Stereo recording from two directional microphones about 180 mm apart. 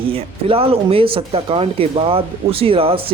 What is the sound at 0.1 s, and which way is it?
Speech, 30° right (ahead or behind).